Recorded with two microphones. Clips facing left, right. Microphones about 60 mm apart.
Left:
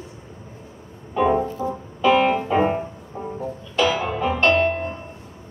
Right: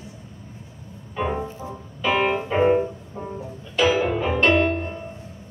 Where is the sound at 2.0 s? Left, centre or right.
Centre.